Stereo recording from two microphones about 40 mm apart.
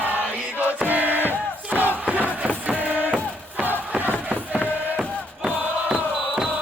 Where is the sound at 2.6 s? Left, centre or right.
Right.